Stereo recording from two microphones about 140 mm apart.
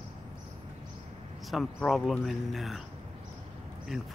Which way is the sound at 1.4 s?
Centre (ahead or behind).